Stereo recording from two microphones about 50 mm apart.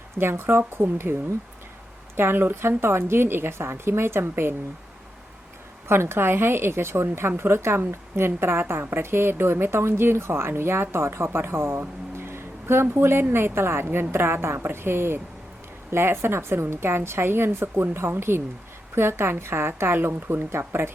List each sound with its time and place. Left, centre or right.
0.2 s a woman's voice: right
2.1 s speech: right
5.9 s a woman's voice: right